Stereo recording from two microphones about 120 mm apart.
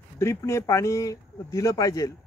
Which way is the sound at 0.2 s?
25° left (ahead or behind).